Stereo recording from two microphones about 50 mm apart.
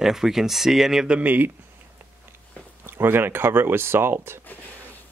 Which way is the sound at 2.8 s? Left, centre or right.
Right.